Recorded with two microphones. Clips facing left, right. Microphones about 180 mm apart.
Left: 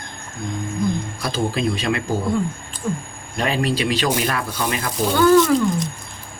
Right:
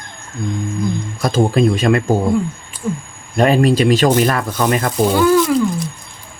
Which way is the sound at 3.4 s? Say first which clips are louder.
Right 8 dB; 50° right (ahead or behind).